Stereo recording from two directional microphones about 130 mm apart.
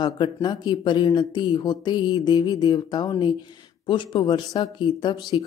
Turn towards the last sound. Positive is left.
turn(degrees=35)  # may be behind; listen again after turning